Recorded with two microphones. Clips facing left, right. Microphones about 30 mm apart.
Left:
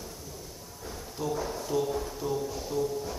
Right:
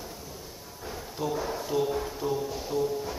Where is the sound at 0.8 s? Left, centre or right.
Centre.